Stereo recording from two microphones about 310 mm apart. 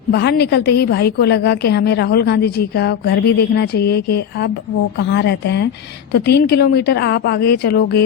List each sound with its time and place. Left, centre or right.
0.1 s a woman's voice: left